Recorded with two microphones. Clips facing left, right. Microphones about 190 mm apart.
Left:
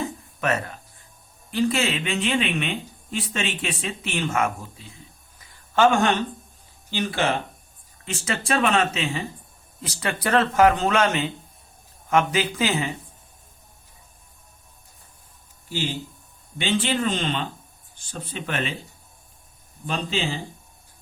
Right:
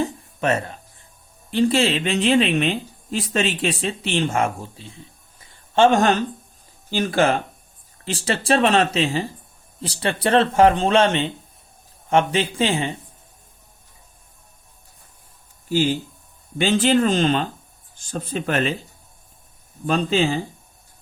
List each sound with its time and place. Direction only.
0.0 s a sound: 30° right (ahead or behind)
1.5 s speech: 30° right (ahead or behind)
5.4 s a sound: 30° right (ahead or behind)
6.9 s speech: 45° right (ahead or behind)
8.0 s speech: 35° right (ahead or behind)
16.6 s speech: 40° right (ahead or behind)
19.9 s speech: 45° right (ahead or behind)